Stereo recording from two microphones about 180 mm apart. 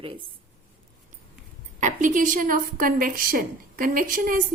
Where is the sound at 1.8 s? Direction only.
45° right (ahead or behind).